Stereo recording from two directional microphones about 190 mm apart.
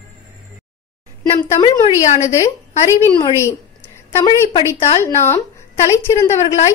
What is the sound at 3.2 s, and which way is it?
Speech, 20° left (ahead or behind).